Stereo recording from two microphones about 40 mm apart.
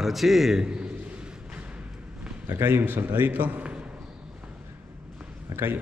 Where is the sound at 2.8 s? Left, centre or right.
Right.